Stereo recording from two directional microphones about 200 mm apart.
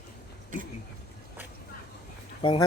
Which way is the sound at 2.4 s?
25° left (ahead or behind).